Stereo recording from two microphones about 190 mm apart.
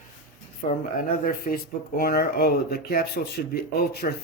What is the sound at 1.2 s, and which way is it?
Speech, 45° left (ahead or behind).